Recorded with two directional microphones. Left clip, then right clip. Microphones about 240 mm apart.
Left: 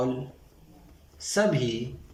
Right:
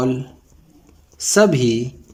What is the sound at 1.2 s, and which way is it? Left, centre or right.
Speech, right.